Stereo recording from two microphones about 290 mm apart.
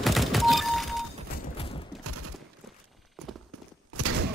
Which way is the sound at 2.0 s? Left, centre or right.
Right.